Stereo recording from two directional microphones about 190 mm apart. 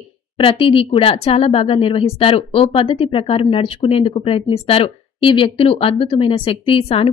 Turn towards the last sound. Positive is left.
turn(degrees=30)  # may be behind; listen again after turning